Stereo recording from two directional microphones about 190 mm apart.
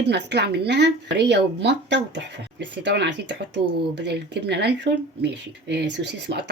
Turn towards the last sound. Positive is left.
turn(degrees=-65)  # may be behind; listen again after turning